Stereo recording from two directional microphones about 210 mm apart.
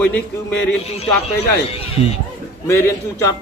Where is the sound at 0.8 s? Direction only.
30° left (ahead or behind).